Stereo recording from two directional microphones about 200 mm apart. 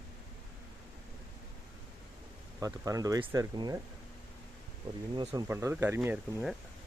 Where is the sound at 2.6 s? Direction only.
15° right (ahead or behind).